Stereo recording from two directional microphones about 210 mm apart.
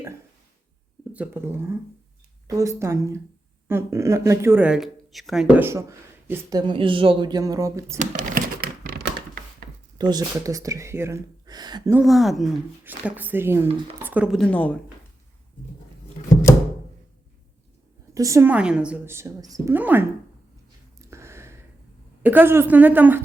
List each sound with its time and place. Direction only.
1.1 s speech: 10° right (ahead or behind)
7.9 s typewriter: 40° right (ahead or behind)
10.0 s speech: 20° right (ahead or behind)
11.9 s speech: centre (ahead or behind)
18.1 s speech: 15° right (ahead or behind)
21.0 s a sound: 15° right (ahead or behind)
22.2 s speech: 10° right (ahead or behind)